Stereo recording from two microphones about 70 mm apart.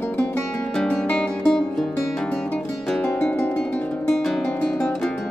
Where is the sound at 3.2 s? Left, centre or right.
Centre.